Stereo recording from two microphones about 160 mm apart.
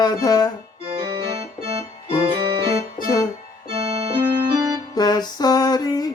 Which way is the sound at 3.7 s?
40° right (ahead or behind).